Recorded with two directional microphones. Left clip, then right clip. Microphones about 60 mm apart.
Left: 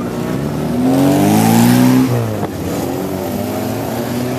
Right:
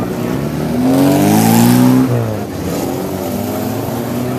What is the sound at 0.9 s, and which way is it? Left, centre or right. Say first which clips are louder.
Vehicle: right 1 dB; centre.